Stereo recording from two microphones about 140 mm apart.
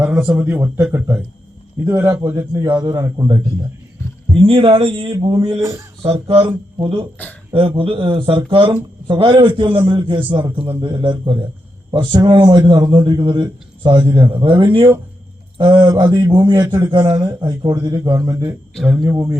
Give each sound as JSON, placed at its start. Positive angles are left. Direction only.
{"t": 0.0, "sound": "a man's voice", "side_deg": -15}
{"t": 4.4, "sound": "a man's voice", "side_deg": -40}